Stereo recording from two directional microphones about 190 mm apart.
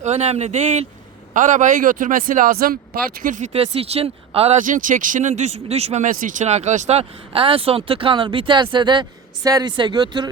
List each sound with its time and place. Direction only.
0.0 s speech: 35° right (ahead or behind)
4.6 s speech: 45° right (ahead or behind); by 10.2 s 20° right (ahead or behind)